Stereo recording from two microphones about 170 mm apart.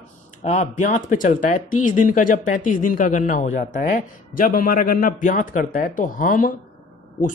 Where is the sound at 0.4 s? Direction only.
45° left (ahead or behind).